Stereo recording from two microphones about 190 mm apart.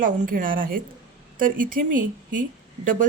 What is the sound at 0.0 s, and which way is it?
A woman's voice, 45° right (ahead or behind).